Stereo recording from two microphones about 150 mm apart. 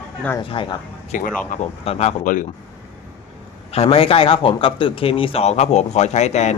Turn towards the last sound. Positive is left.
turn(degrees=50)  # may be behind; listen again after turning